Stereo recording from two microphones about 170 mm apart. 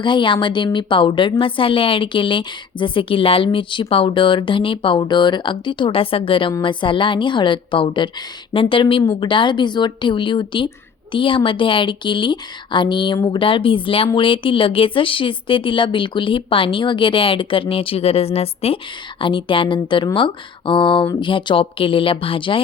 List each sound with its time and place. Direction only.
0.0 s a woman's voice: 30° left (ahead or behind)